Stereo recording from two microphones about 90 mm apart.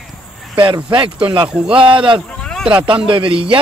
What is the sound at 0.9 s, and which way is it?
A man's voice, 65° right (ahead or behind).